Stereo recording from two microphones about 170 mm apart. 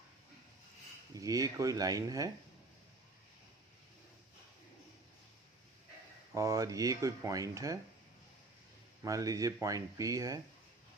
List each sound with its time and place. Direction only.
1.1 s speech: 20° right (ahead or behind)
6.3 s speech: 20° right (ahead or behind)
9.0 s speech: 20° right (ahead or behind)